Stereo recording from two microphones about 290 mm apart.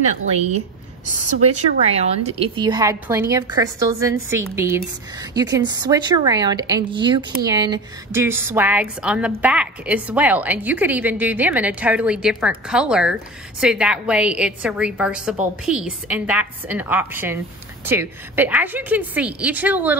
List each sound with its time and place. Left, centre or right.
0.4 s a woman's voice: right
1.9 s a woman's voice: right